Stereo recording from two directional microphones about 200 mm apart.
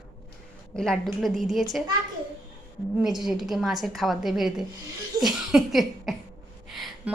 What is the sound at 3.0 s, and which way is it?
A woman's voice, centre (ahead or behind).